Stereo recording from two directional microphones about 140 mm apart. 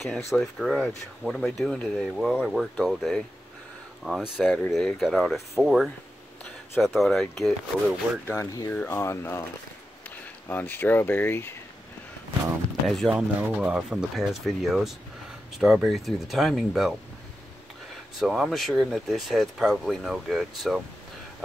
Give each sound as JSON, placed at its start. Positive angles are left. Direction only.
{"t": 0.3, "sound": "speech", "side_deg": 0}
{"t": 8.3, "sound": "speech", "side_deg": 20}
{"t": 12.8, "sound": "speech", "side_deg": 0}
{"t": 18.2, "sound": "speech", "side_deg": 0}